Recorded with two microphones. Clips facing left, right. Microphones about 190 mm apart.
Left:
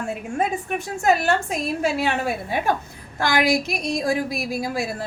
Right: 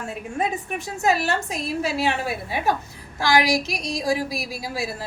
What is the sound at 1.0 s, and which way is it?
A woman's voice, 50° left (ahead or behind).